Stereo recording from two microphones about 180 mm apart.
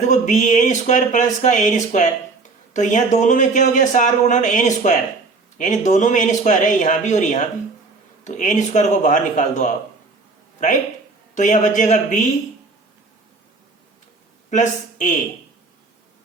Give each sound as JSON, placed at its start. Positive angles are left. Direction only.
{"t": 0.1, "sound": "a man's voice", "side_deg": 40}
{"t": 11.3, "sound": "speech", "side_deg": 40}
{"t": 14.5, "sound": "speech", "side_deg": 45}